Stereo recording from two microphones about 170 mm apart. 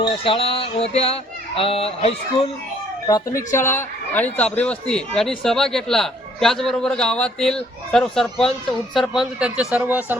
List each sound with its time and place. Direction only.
0.0 s music: 30° left (ahead or behind)
3.1 s a man's voice: 20° left (ahead or behind); by 10.2 s 10° right (ahead or behind)